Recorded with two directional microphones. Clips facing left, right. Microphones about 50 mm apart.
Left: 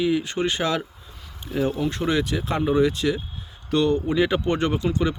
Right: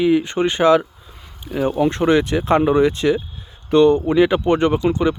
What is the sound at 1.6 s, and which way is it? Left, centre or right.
Speech, right.